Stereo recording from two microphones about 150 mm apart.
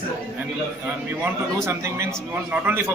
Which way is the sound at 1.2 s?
20° right (ahead or behind).